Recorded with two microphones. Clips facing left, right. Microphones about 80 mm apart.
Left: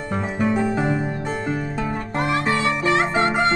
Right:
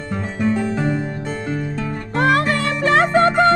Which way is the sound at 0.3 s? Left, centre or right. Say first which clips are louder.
Right 1 dB; centre.